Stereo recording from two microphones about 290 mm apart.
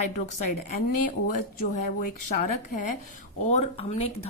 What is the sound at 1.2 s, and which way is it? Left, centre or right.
Speech, left.